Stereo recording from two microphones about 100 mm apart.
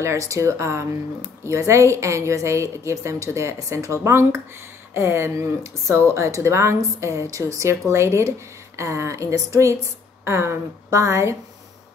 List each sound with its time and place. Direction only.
0.0 s a woman's voice: 30° right (ahead or behind)